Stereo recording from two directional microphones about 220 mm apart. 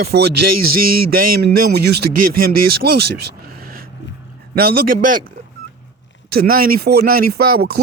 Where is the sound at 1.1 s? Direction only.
40° right (ahead or behind).